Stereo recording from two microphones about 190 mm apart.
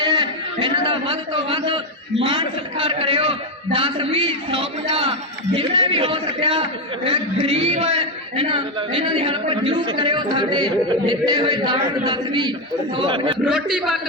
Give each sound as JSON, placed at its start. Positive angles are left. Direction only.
{"t": 0.0, "sound": "a man's voice", "side_deg": -25}
{"t": 13.4, "sound": "a man's voice", "side_deg": 0}